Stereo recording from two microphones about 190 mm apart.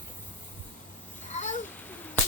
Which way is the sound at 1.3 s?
40° left (ahead or behind).